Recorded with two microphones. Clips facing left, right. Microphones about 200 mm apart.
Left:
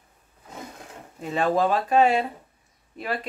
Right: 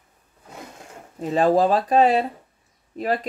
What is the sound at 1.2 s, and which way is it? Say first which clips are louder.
Speech: right 5 dB; 35° right (ahead or behind).